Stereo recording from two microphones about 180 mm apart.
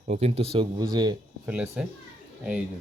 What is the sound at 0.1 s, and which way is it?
Speech, 35° right (ahead or behind).